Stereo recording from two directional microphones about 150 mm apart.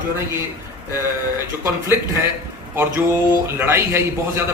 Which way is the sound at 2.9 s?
15° right (ahead or behind).